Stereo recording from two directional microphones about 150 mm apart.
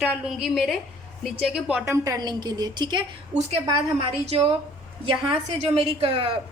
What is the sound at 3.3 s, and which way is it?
Speech, 40° right (ahead or behind).